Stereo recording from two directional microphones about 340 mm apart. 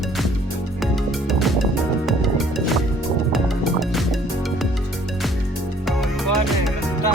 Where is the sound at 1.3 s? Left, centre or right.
Centre.